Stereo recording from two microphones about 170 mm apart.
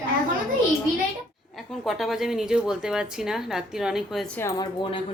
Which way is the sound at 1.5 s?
Centre (ahead or behind).